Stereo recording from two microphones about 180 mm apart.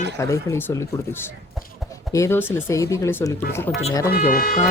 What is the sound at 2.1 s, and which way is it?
Speech, 15° left (ahead or behind).